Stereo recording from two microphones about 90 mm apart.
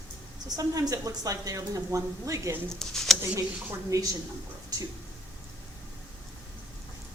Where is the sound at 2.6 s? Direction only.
5° left (ahead or behind).